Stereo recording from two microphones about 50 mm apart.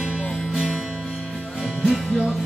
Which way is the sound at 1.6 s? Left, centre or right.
Centre.